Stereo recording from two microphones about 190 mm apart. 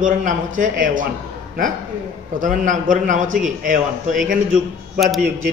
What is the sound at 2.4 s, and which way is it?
A man's voice, 45° right (ahead or behind).